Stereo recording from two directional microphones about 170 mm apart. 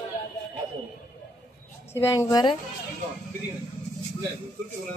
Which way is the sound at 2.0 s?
15° left (ahead or behind).